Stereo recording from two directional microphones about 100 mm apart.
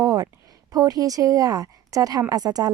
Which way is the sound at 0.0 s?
40° right (ahead or behind).